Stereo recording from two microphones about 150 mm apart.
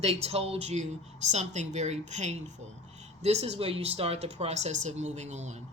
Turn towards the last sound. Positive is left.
turn(degrees=-50)  # may be behind; listen again after turning